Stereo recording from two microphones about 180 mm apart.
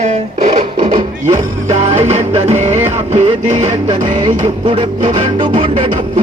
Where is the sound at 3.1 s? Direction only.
35° right (ahead or behind).